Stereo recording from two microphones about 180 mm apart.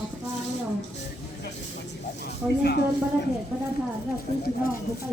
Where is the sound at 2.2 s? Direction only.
65° left (ahead or behind).